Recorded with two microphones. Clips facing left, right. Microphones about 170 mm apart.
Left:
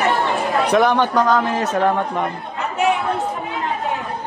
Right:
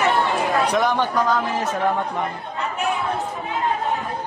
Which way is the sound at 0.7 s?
70° left (ahead or behind).